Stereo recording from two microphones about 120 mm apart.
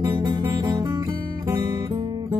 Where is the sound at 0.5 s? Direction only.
30° right (ahead or behind).